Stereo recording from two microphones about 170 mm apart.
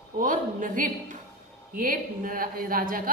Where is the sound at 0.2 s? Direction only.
50° right (ahead or behind).